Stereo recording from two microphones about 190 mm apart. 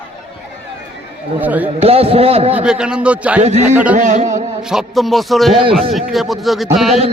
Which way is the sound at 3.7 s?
5° right (ahead or behind).